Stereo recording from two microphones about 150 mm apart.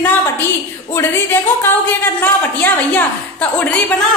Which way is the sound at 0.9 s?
15° left (ahead or behind).